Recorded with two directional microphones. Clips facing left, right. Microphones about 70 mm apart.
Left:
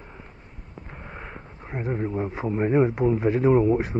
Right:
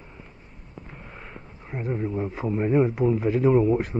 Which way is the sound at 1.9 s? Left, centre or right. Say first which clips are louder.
Even; left.